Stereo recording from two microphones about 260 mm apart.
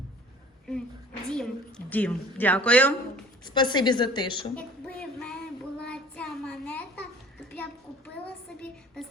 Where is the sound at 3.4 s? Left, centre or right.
Centre.